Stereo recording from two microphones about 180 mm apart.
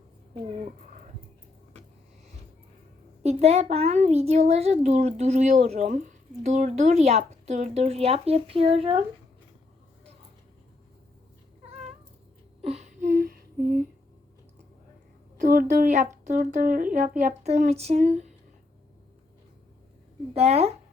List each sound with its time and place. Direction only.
3.2 s a child's voice: 35° right (ahead or behind)
12.6 s a sound: 40° right (ahead or behind)
13.1 s lullaby: 55° right (ahead or behind)
15.4 s a child's voice: 50° right (ahead or behind)
20.3 s a child's voice: 35° right (ahead or behind)